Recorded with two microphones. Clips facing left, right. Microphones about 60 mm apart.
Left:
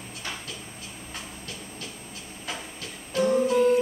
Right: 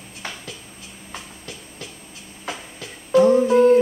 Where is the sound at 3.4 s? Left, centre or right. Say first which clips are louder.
Right 7 dB; right.